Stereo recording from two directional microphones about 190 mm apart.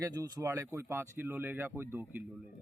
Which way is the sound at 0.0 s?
15° right (ahead or behind).